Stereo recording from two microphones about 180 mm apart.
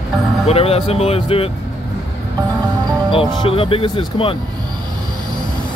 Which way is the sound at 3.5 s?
30° left (ahead or behind).